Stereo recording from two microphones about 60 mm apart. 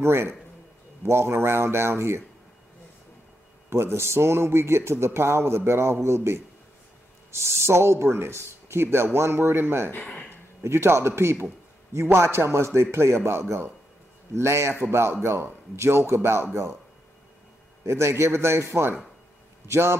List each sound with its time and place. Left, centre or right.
0.0 s speech: right
3.7 s speech: right
17.8 s speech: right